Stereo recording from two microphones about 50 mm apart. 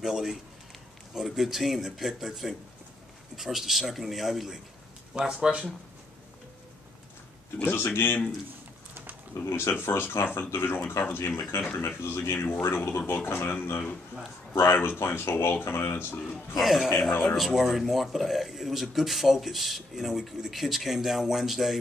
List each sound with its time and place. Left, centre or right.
0.0 s speech: centre
5.1 s speech: centre
7.6 s speech: left
9.5 s speech: left
12.4 s speech: left
14.5 s speech: left
16.2 s speech: centre